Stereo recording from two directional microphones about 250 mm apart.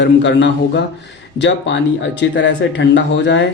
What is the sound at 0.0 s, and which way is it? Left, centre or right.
Speech, left.